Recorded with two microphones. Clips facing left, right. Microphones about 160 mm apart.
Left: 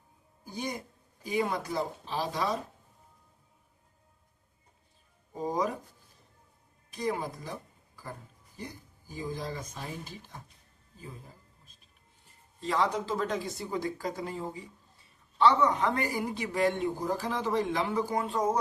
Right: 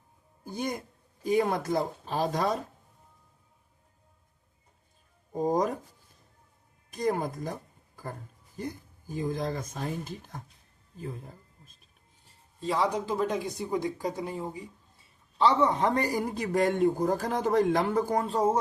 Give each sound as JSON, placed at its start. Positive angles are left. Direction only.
{"t": 0.4, "sound": "a man's voice", "side_deg": -50}
{"t": 5.4, "sound": "a man's voice", "side_deg": -45}
{"t": 6.9, "sound": "a man's voice", "side_deg": -45}
{"t": 12.6, "sound": "a woman's voice", "side_deg": -15}
{"t": 15.9, "sound": "a man's voice", "side_deg": -40}